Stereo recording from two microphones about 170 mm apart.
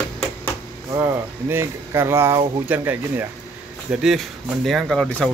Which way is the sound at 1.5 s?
15° right (ahead or behind).